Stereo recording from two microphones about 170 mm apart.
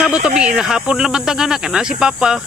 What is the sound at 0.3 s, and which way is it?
Speech, 5° right (ahead or behind).